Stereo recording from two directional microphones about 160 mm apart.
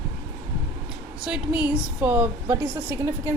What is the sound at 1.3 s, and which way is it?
A woman's voice, 5° right (ahead or behind).